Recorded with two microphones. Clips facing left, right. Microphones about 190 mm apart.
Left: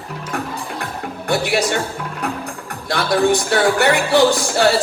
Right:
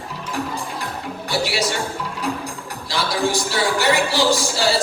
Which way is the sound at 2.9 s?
60° left (ahead or behind).